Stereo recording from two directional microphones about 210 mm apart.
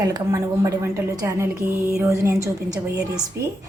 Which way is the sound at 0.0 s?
15° right (ahead or behind).